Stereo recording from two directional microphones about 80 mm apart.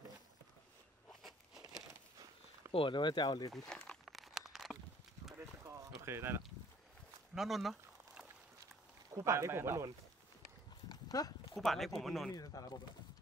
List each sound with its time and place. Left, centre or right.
2.8 s speech: left
3.5 s speech: centre
4.0 s a sound: centre
5.7 s a sound: right
7.3 s speech: centre
9.1 s speech: right
10.9 s dog: left
11.5 s speech: centre
12.3 s speech: left